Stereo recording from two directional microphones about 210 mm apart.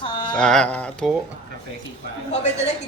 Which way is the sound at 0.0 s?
20° left (ahead or behind).